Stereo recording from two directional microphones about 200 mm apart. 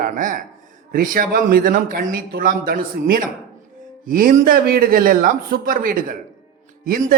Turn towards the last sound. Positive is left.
turn(degrees=-45)  # may be behind; listen again after turning